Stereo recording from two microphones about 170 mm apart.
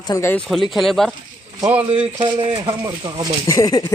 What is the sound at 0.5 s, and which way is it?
Speech, centre (ahead or behind).